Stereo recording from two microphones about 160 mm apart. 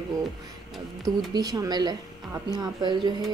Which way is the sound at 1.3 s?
25° right (ahead or behind).